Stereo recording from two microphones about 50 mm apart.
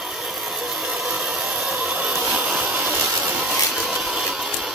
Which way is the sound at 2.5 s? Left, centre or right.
Right.